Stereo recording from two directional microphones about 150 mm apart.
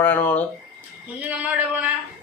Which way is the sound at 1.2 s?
10° right (ahead or behind).